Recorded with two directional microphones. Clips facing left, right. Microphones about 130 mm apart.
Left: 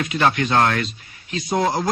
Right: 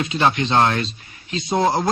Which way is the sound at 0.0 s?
25° right (ahead or behind).